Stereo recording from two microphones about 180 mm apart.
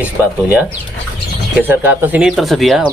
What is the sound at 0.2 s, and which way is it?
Speech, 10° right (ahead or behind).